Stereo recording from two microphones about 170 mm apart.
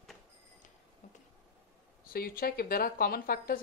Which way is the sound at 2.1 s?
60° left (ahead or behind).